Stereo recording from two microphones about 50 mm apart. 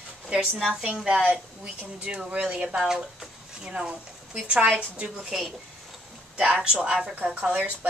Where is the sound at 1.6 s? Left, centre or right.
Right.